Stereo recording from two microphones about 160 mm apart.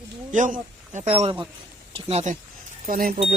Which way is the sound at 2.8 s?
60° right (ahead or behind).